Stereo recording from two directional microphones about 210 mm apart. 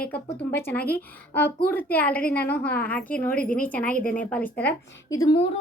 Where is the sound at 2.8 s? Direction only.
5° left (ahead or behind).